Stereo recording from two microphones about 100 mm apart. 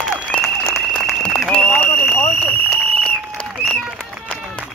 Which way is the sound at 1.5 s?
15° left (ahead or behind).